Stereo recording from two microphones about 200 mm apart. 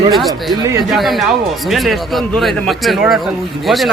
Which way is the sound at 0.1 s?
Centre (ahead or behind).